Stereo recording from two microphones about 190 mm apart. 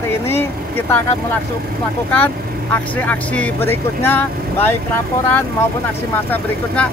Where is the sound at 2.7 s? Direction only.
10° left (ahead or behind).